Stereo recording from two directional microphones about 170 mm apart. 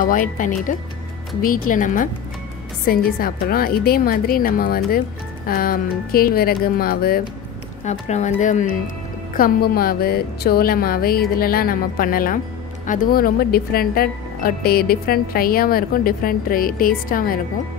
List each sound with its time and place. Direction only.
0.0 s speech: 50° left (ahead or behind)
7.8 s speech: 45° left (ahead or behind)
9.3 s speech: 60° left (ahead or behind)